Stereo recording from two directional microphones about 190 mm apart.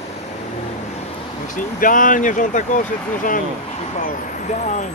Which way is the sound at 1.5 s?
45° left (ahead or behind).